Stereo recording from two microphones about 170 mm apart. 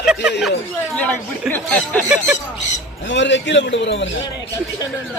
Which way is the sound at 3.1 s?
90° left.